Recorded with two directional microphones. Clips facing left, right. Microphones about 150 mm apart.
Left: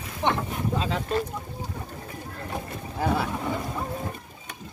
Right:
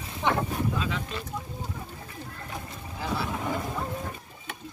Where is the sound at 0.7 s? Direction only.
35° left (ahead or behind).